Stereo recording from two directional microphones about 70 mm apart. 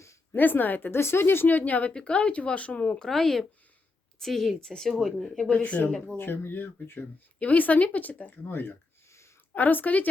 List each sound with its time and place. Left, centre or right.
0.3 s a woman's voice: left
3.0 s speech: centre
6.1 s a woman's voice: left